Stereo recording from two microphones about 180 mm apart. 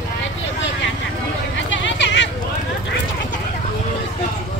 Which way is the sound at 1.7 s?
85° left.